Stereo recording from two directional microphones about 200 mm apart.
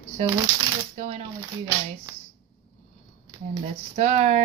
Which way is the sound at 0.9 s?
30° right (ahead or behind).